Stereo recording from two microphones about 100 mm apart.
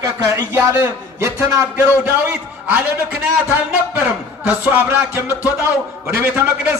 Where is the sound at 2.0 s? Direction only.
15° right (ahead or behind).